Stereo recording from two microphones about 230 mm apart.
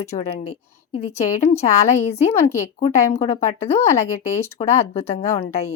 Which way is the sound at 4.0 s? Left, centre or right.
Centre.